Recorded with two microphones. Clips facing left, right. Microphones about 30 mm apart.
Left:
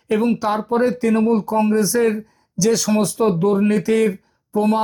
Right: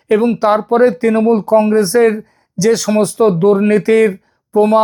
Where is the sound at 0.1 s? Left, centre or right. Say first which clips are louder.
Right 7 dB; right.